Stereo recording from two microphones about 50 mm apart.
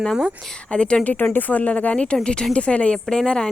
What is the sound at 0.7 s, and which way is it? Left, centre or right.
Speech, centre.